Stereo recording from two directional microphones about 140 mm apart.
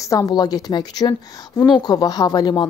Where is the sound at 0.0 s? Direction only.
25° left (ahead or behind).